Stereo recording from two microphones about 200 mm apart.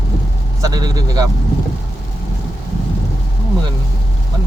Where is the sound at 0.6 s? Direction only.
20° right (ahead or behind).